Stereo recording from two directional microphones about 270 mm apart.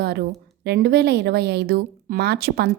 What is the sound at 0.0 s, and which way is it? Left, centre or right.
A woman's voice, right.